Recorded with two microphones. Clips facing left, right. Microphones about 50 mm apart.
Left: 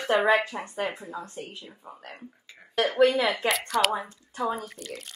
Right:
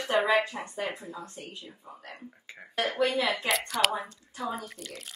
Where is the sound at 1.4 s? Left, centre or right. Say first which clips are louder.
Left 3 dB; left.